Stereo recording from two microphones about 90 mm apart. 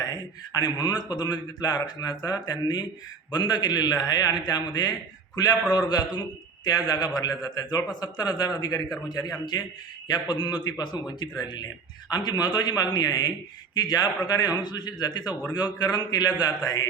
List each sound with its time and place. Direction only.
0.0 s a man's voice: 50° left (ahead or behind)